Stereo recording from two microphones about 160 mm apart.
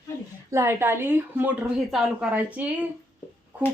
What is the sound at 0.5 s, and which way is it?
A woman's voice, 15° right (ahead or behind).